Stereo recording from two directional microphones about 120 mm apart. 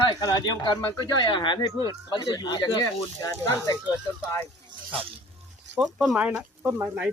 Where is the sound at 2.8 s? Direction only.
20° left (ahead or behind).